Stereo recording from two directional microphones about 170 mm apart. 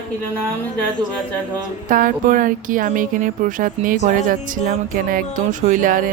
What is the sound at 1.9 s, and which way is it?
Speech, 50° right (ahead or behind).